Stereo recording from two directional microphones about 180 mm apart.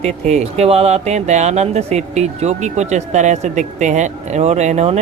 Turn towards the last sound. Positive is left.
turn(degrees=-35)  # may be behind; listen again after turning